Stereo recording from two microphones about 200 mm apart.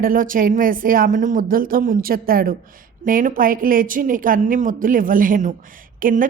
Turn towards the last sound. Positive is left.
turn(degrees=-40)  # may be behind; listen again after turning